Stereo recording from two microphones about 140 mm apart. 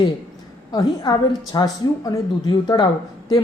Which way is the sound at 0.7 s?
30° left (ahead or behind).